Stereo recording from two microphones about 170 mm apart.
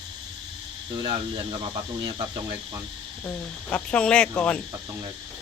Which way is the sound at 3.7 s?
5° left (ahead or behind).